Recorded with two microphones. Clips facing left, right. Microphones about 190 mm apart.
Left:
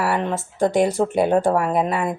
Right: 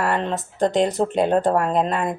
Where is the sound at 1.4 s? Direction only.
10° left (ahead or behind).